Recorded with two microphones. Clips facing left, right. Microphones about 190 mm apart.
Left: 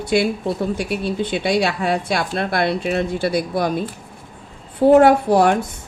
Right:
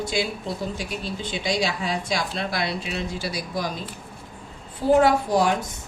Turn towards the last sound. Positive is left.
turn(degrees=60)  # may be behind; listen again after turning